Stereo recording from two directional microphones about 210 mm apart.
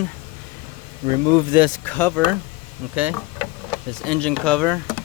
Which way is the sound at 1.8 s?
10° left (ahead or behind).